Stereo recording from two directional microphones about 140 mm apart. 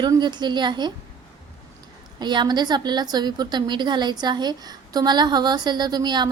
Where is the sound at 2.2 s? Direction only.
30° right (ahead or behind).